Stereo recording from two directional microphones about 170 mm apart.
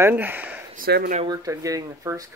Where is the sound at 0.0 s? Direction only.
10° right (ahead or behind).